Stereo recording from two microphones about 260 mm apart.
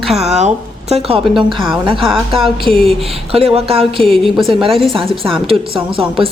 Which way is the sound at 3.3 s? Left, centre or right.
Right.